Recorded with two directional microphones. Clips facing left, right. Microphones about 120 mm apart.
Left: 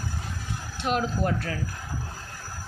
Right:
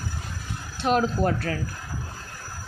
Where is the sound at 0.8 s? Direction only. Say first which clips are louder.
Right 4 dB; 40° right (ahead or behind).